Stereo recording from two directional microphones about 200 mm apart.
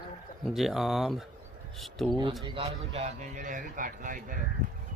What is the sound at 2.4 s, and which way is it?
Speech, 30° right (ahead or behind).